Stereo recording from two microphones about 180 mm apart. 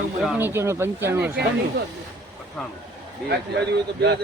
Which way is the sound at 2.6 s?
Centre (ahead or behind).